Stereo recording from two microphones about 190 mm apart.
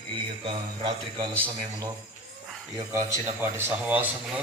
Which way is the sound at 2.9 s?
15° right (ahead or behind).